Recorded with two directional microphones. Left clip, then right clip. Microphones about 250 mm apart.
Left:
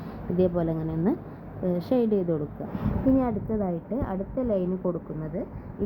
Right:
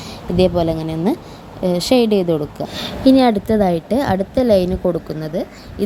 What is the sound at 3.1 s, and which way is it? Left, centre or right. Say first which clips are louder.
A woman's voice: right 13 dB; right.